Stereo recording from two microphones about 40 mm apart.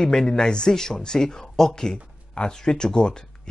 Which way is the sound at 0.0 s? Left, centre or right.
Centre.